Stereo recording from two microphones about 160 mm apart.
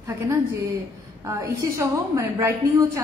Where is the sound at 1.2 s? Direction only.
20° right (ahead or behind).